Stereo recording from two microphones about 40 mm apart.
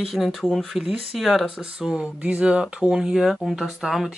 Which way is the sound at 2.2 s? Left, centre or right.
Right.